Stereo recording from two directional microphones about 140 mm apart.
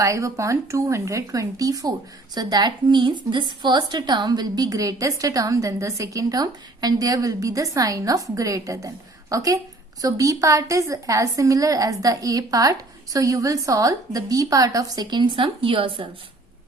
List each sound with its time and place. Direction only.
0.0 s a woman's voice: 20° right (ahead or behind); by 16.0 s 40° right (ahead or behind)